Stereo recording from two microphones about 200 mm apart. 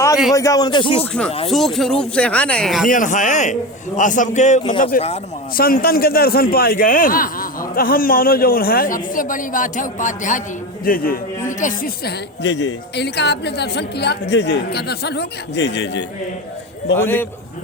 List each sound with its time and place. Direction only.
0.3 s a man's voice: 15° left (ahead or behind)
1.5 s speech: centre (ahead or behind)
2.8 s a man's voice: 40° left (ahead or behind)
5.5 s a man's voice: 45° left (ahead or behind)
12.4 s a woman's voice: 60° left (ahead or behind)
17.0 s a man's voice: 10° left (ahead or behind)